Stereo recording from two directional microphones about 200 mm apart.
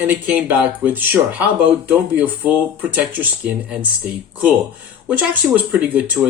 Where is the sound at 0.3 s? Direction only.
10° right (ahead or behind).